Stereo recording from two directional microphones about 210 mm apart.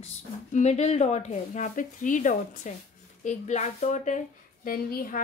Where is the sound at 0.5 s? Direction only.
35° left (ahead or behind).